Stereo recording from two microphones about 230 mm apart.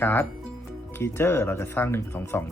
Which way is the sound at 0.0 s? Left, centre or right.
Centre.